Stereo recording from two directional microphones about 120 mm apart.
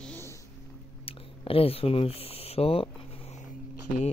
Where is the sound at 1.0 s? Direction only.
50° left (ahead or behind).